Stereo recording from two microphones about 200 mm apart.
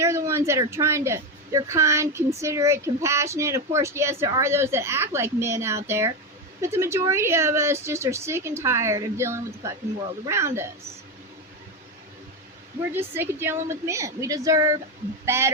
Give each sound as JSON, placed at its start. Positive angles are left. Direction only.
{"t": 0.0, "sound": "a woman's voice", "side_deg": -15}
{"t": 12.9, "sound": "a woman's voice", "side_deg": -10}